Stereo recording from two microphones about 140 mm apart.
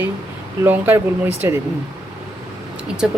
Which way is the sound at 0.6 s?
15° right (ahead or behind).